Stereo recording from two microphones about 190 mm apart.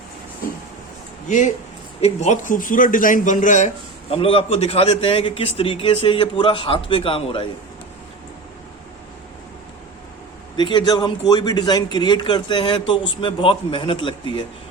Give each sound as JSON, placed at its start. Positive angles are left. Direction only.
{"t": 2.0, "sound": "a man's voice", "side_deg": 35}
{"t": 4.1, "sound": "a man's voice", "side_deg": 30}
{"t": 10.6, "sound": "a man's voice", "side_deg": 25}